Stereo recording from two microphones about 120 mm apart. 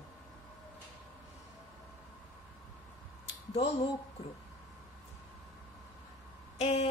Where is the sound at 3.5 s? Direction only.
60° left (ahead or behind).